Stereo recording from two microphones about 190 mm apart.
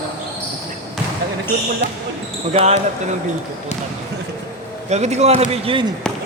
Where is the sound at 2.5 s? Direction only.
35° right (ahead or behind).